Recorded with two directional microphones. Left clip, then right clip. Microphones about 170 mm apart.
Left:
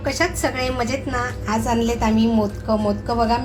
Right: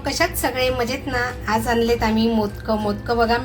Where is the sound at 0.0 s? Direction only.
Centre (ahead or behind).